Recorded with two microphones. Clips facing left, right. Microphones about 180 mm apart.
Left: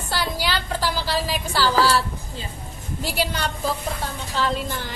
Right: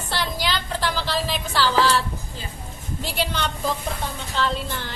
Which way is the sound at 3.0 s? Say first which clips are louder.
Left 1 dB; 10° left (ahead or behind).